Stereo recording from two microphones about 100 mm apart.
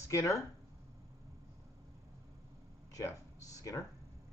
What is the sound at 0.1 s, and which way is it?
Speech, 30° left (ahead or behind).